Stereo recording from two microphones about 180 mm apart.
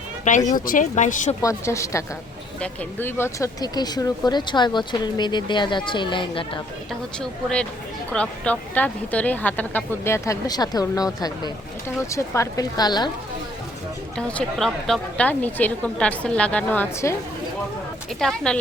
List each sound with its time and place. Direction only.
0.3 s speech: 45° left (ahead or behind)
1.4 s speech: 15° left (ahead or behind)
7.2 s speech: 5° left (ahead or behind); by 13.1 s 25° left (ahead or behind)
14.2 s speech: 5° left (ahead or behind)
18.2 s speech: centre (ahead or behind)